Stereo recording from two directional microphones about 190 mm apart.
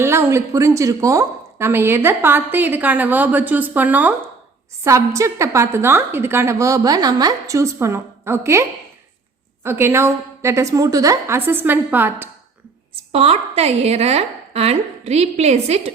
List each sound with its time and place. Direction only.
0.0 s a woman's voice: 15° right (ahead or behind)
9.6 s a woman's voice: 15° right (ahead or behind)
13.1 s a woman's voice: 35° right (ahead or behind)